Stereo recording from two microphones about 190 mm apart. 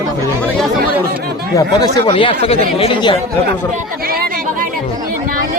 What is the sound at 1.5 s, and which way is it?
Speech, 20° left (ahead or behind).